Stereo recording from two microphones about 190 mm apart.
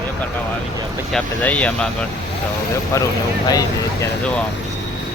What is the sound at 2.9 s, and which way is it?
Speech, 15° left (ahead or behind).